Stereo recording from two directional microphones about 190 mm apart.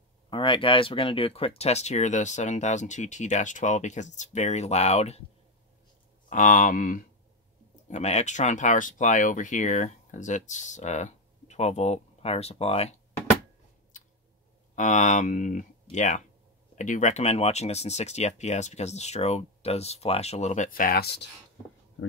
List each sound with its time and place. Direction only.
0.3 s speech: 25° left (ahead or behind)
6.2 s speech: 45° left (ahead or behind)
14.8 s speech: 40° left (ahead or behind); by 21.3 s 60° left (ahead or behind)